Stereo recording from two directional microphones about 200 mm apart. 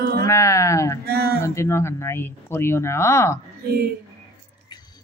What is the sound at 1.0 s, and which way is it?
Speech, 50° right (ahead or behind).